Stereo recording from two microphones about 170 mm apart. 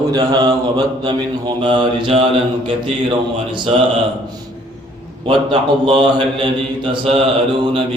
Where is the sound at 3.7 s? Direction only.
35° right (ahead or behind).